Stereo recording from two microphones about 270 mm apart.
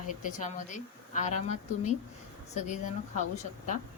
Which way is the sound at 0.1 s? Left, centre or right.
Left.